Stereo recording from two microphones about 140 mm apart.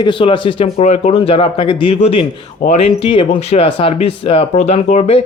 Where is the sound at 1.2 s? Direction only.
45° left (ahead or behind).